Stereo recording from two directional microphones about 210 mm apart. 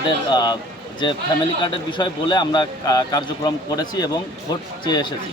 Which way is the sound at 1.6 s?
20° left (ahead or behind).